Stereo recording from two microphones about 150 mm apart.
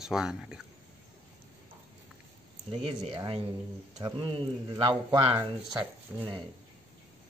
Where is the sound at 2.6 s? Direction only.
35° right (ahead or behind).